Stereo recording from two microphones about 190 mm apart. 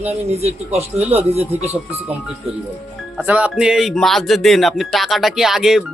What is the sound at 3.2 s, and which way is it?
Speech, 5° right (ahead or behind).